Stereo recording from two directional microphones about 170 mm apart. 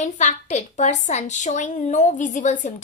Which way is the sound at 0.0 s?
45° left (ahead or behind).